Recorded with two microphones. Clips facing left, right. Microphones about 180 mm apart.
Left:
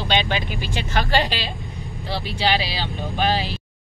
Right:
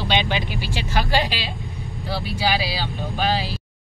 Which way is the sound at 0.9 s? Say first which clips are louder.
Left 1 dB; 10° right (ahead or behind).